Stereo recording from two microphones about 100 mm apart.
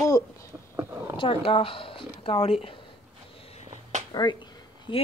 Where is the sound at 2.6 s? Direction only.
60° left (ahead or behind); by 3.7 s 85° left.